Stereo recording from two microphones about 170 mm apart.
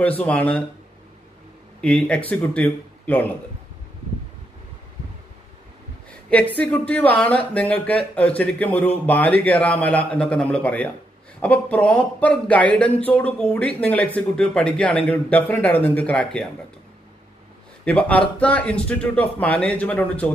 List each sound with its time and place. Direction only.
0.2 s speech: 10° left (ahead or behind)
1.8 s speech: 5° left (ahead or behind)
6.3 s speech: 10° left (ahead or behind)
17.8 s speech: 5° left (ahead or behind)